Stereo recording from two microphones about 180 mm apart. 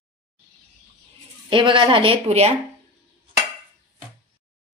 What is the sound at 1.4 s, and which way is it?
Speech, 30° right (ahead or behind).